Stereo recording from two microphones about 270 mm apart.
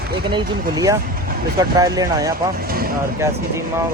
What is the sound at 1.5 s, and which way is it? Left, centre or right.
Speech, centre.